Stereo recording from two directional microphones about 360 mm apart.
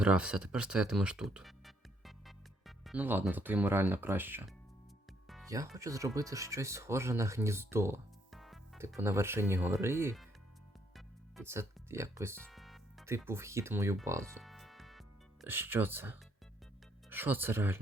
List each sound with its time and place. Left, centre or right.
0.0 s speech: centre
10.9 s music: centre
12.4 s speech: centre
14.3 s music: centre
17.1 s speech: centre